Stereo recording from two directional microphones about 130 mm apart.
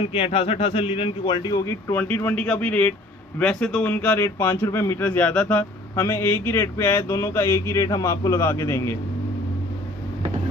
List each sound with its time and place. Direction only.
0.0 s a man's voice: 45° left (ahead or behind)
1.7 s speech: 15° left (ahead or behind)